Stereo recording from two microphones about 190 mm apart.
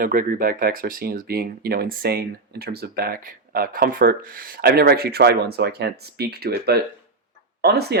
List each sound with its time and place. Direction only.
0.0 s speech: 45° right (ahead or behind)